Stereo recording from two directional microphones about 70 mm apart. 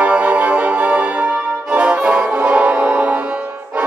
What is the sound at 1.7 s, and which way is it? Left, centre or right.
Brass instrument, centre.